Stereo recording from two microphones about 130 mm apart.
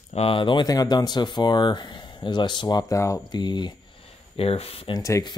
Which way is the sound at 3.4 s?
35° left (ahead or behind).